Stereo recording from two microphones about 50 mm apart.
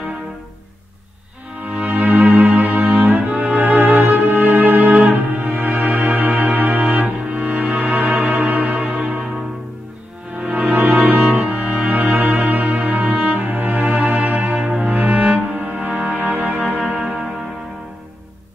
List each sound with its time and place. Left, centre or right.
1.6 s music: right
8.7 s music: centre
10.7 s music: right
13.4 s music: right; by 17.3 s centre